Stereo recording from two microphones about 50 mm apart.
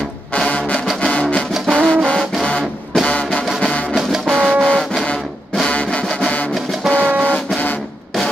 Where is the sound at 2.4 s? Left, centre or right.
Centre.